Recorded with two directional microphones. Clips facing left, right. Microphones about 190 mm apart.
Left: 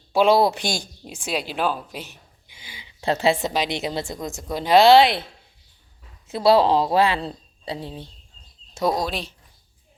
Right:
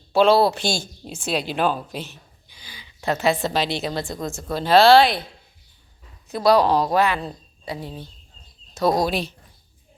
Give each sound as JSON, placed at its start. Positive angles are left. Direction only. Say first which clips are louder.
{"t": 0.1, "sound": "speech", "louder": "right 1 dB", "side_deg": 15}
{"t": 2.5, "sound": "a sound", "louder": "left 1 dB", "side_deg": 25}
{"t": 3.4, "sound": "a woman's voice", "louder": "right 1 dB", "side_deg": 15}
{"t": 6.2, "sound": "a woman's voice", "louder": "even", "side_deg": 25}
{"t": 8.9, "sound": "speech", "louder": "right 5 dB", "side_deg": -5}